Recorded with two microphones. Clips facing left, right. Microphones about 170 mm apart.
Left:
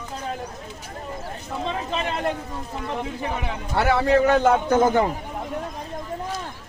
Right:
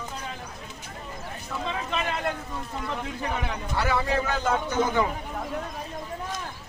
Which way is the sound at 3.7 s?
65° left (ahead or behind).